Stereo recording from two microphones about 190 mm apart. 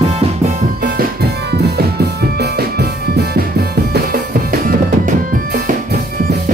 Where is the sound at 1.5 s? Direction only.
60° right (ahead or behind).